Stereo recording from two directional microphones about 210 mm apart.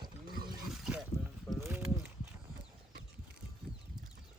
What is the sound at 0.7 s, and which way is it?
Boat, centre (ahead or behind).